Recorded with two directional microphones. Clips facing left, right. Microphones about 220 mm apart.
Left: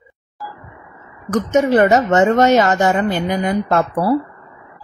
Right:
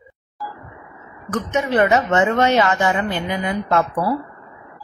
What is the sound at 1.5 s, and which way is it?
A woman's voice, 40° left (ahead or behind).